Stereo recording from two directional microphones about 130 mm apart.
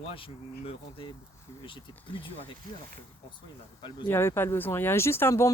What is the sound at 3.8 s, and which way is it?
Speech, 35° left (ahead or behind).